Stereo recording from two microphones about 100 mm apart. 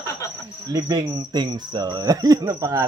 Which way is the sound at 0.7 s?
40° right (ahead or behind).